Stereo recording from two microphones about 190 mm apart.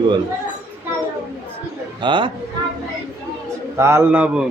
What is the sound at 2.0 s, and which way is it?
Speech, 25° right (ahead or behind).